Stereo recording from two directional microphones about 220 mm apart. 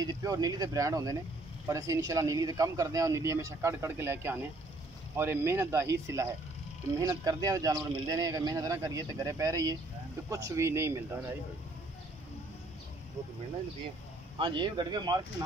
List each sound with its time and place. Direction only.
0.0 s speech: 15° right (ahead or behind)
14.4 s speech: 20° right (ahead or behind)